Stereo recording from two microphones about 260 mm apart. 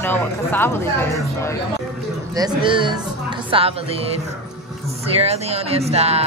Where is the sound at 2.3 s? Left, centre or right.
Centre.